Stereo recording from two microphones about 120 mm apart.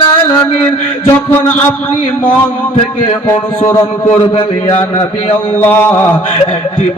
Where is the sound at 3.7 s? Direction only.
20° left (ahead or behind).